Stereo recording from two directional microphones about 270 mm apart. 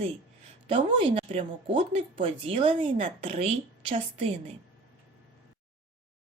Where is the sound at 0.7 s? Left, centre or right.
Centre.